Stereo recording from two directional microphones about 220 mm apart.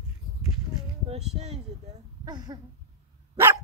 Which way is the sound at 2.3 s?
20° right (ahead or behind).